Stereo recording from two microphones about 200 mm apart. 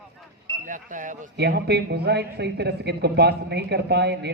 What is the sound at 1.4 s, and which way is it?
A man's voice, 55° right (ahead or behind).